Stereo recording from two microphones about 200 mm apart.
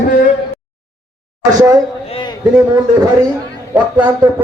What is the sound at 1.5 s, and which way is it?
Speech, 15° right (ahead or behind).